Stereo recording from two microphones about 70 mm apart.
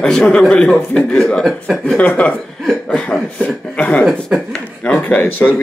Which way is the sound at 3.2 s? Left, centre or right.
Centre.